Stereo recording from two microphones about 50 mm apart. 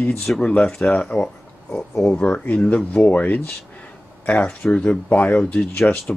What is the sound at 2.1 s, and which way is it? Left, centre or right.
Speech, left.